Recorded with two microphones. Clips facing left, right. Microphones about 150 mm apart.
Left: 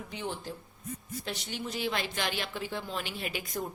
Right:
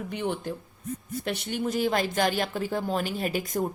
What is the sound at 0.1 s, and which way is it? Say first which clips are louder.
Speech: right 7 dB; 60° right (ahead or behind).